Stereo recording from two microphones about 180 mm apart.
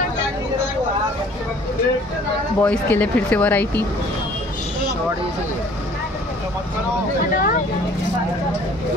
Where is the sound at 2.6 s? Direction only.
10° left (ahead or behind).